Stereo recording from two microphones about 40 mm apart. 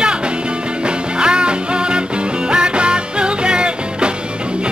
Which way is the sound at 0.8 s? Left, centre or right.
Right.